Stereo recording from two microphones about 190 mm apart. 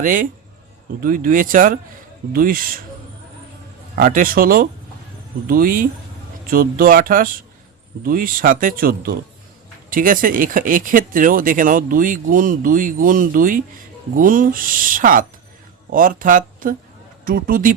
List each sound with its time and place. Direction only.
0.0 s speech: 45° right (ahead or behind)
3.9 s speech: 50° right (ahead or behind)